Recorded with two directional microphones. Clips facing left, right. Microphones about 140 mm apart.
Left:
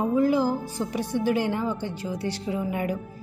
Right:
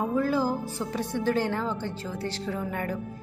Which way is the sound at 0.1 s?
15° left (ahead or behind).